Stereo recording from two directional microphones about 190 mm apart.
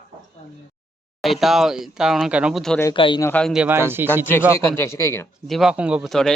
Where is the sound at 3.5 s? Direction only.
10° right (ahead or behind).